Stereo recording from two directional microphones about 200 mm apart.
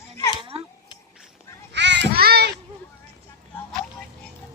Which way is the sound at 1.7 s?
60° right (ahead or behind).